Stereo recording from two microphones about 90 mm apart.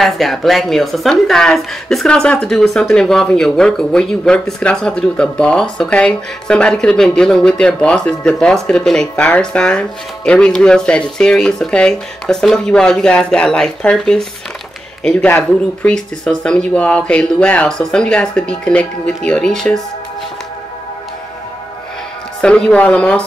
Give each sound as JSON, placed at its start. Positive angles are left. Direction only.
{"t": 0.0, "sound": "a woman's voice", "side_deg": 0}
{"t": 15.2, "sound": "speech", "side_deg": 20}
{"t": 15.9, "sound": "a woman's voice", "side_deg": 10}
{"t": 22.4, "sound": "a woman's voice", "side_deg": 10}